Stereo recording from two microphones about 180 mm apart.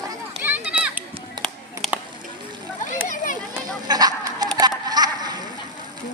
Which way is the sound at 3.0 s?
45° left (ahead or behind).